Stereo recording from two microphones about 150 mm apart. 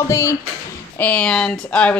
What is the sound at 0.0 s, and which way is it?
Speech, 20° left (ahead or behind).